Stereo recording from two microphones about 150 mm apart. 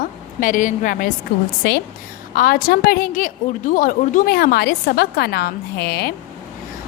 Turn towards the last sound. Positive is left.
turn(degrees=90)